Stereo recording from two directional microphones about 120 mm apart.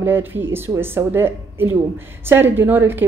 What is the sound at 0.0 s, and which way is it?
A woman's voice, 20° right (ahead or behind).